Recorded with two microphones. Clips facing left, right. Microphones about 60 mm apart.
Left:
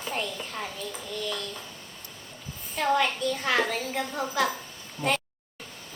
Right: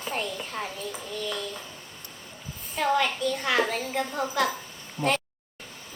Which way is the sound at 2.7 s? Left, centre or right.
Centre.